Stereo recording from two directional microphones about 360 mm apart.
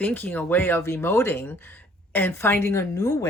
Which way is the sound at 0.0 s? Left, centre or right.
Centre.